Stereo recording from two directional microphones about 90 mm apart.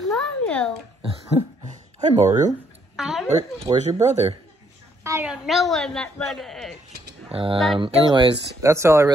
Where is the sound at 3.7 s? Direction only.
45° right (ahead or behind).